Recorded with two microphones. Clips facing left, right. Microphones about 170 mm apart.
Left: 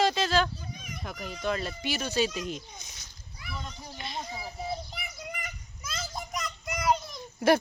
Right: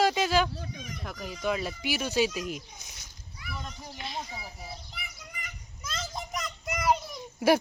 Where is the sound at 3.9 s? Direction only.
Centre (ahead or behind).